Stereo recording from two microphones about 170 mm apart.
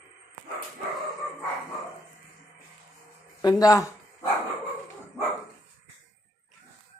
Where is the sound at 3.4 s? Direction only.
20° left (ahead or behind).